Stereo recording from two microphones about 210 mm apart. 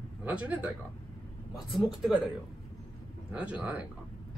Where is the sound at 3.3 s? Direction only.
5° right (ahead or behind).